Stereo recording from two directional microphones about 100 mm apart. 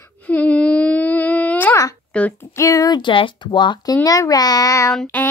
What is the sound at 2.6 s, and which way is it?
Speech, 35° left (ahead or behind).